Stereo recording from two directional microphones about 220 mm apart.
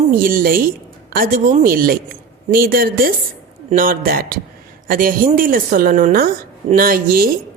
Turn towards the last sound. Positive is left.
turn(degrees=-40)  # may be behind; listen again after turning